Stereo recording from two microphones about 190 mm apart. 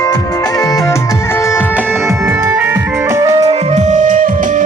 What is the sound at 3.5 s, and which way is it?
Music, 35° right (ahead or behind).